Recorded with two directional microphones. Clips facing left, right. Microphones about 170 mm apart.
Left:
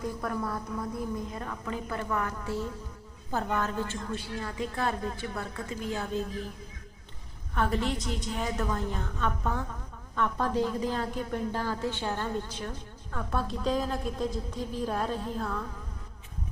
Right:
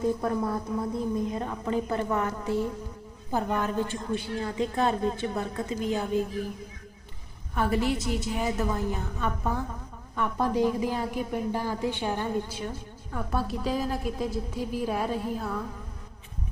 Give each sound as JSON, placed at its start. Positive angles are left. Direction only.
{"t": 0.0, "sound": "a woman's voice", "side_deg": -25}
{"t": 7.5, "sound": "a woman's voice", "side_deg": -10}